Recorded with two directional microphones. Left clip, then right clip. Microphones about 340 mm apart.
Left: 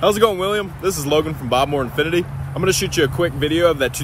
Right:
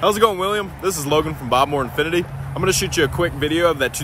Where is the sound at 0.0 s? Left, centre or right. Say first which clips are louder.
Left 1 dB; centre.